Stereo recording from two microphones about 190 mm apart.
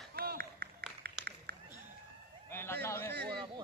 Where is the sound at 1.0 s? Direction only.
55° right (ahead or behind).